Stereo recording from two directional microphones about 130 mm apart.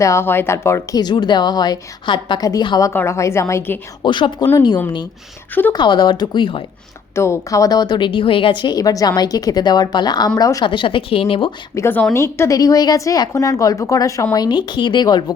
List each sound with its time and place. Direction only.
0.0 s a woman's voice: 20° left (ahead or behind)
2.9 s a woman's voice: 20° left (ahead or behind)
4.0 s a woman's voice: 35° left (ahead or behind)
5.7 s a woman's voice: 35° left (ahead or behind)
7.2 s a woman's voice: 25° left (ahead or behind); by 11.5 s 45° left (ahead or behind)
11.7 s a woman's voice: 20° left (ahead or behind)